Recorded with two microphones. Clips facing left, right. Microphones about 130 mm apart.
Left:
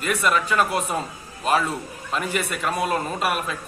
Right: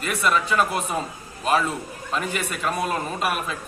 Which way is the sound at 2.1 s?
Centre (ahead or behind).